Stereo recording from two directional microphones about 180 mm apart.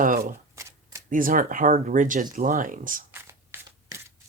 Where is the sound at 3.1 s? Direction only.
15° right (ahead or behind).